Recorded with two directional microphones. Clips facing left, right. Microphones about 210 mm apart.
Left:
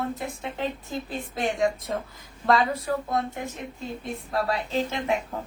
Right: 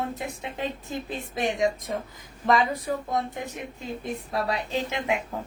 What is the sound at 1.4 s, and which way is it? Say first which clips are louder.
Speech: even; 15° right (ahead or behind).